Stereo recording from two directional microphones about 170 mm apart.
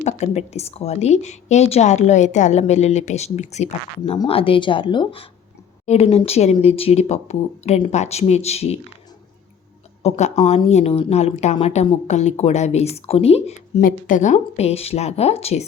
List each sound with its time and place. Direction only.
0.0 s a woman's voice: 40° left (ahead or behind)
5.8 s a woman's voice: 40° left (ahead or behind)
10.0 s a woman's voice: 40° left (ahead or behind)
13.8 s a woman's voice: 50° left (ahead or behind)